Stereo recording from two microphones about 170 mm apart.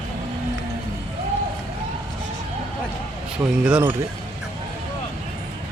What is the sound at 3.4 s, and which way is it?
Speech, 10° right (ahead or behind).